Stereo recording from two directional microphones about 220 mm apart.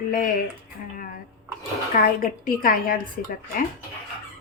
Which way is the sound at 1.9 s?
40° left (ahead or behind).